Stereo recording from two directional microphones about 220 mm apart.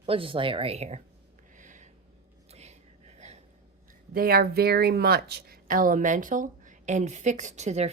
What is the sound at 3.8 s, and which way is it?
Speech, 40° right (ahead or behind).